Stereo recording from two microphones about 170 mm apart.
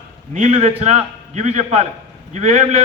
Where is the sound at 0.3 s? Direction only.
45° right (ahead or behind).